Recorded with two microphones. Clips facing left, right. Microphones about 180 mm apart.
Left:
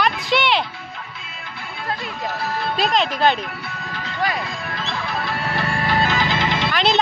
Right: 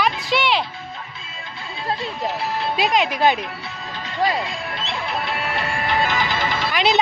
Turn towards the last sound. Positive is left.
turn(degrees=-10)  # may be behind; listen again after turning